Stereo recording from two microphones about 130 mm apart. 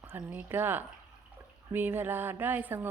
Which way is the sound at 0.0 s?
15° right (ahead or behind).